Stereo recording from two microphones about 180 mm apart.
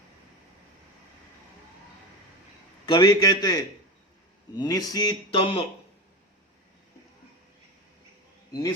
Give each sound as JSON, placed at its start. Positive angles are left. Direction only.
{"t": 2.8, "sound": "speech", "side_deg": 25}